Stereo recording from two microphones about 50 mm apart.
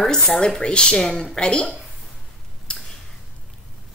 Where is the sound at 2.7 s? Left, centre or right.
Centre.